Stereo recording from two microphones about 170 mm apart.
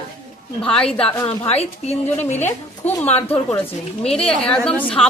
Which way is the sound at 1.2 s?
35° left (ahead or behind).